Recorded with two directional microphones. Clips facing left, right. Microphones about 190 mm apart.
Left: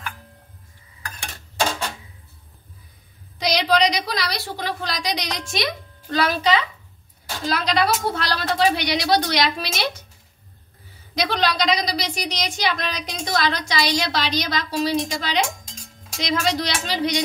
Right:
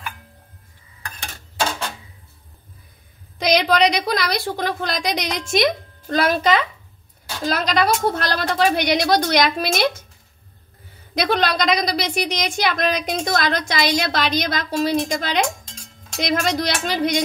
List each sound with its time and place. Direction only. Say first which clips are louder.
3.3 s a woman's voice: right 3 dB; 55° right (ahead or behind)
11.1 s a woman's voice: right 2 dB; 50° right (ahead or behind)